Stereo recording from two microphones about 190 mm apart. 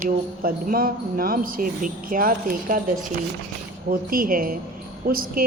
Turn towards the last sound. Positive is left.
turn(degrees=-50)  # may be behind; listen again after turning